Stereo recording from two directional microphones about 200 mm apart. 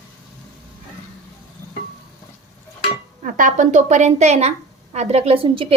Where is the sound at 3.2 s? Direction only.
40° right (ahead or behind).